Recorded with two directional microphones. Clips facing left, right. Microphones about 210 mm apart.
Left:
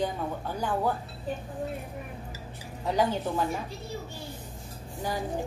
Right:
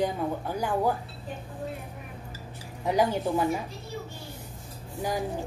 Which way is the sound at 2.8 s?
10° right (ahead or behind).